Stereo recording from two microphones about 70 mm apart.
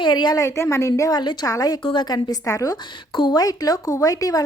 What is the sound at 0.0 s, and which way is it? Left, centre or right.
Speech, left.